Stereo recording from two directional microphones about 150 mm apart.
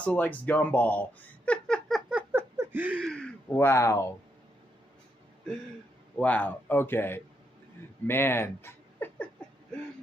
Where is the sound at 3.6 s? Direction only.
20° left (ahead or behind).